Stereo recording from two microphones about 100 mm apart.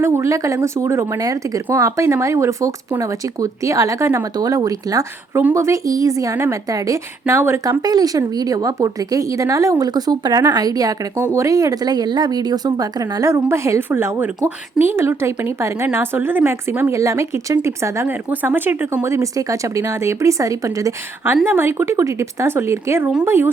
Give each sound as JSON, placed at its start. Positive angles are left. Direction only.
{"t": 0.0, "sound": "a woman's voice", "side_deg": -30}
{"t": 21.4, "sound": "speech", "side_deg": -20}